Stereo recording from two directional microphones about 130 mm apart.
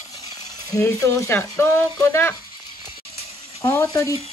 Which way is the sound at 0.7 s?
20° left (ahead or behind).